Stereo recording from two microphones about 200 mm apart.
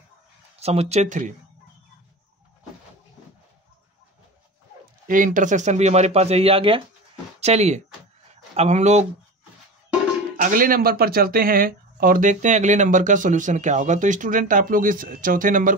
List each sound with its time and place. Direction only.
0.6 s speech: 30° right (ahead or behind)
5.0 s speech: 40° right (ahead or behind)
10.3 s speech: 45° right (ahead or behind)